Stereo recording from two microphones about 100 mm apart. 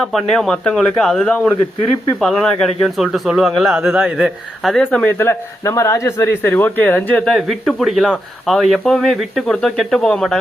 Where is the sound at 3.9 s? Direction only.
15° right (ahead or behind).